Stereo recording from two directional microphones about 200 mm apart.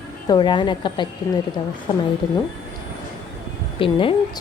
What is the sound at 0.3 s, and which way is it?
Speech, 20° left (ahead or behind).